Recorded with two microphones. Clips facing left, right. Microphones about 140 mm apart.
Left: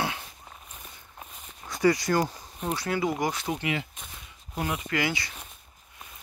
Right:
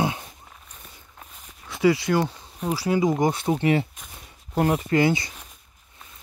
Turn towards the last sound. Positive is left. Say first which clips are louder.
# right 8 dB
turn(degrees=-25)  # may be behind; listen again after turning